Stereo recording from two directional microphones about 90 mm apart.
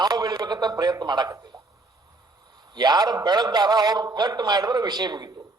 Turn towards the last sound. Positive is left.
turn(degrees=-50)  # may be behind; listen again after turning